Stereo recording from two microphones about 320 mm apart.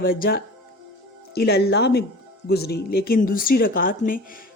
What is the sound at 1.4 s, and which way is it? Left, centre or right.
A woman's voice, left.